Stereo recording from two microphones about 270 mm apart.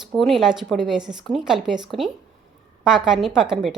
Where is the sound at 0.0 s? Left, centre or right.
Centre.